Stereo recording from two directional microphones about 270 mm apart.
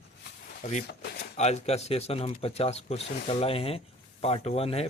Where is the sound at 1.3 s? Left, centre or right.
Left.